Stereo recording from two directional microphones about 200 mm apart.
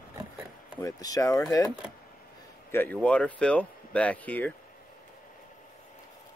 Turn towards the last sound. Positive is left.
turn(degrees=10)  # may be behind; listen again after turning